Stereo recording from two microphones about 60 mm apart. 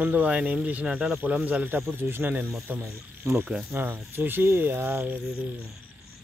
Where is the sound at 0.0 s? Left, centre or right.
Right.